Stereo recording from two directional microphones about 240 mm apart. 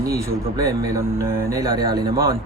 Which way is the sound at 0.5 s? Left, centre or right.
Centre.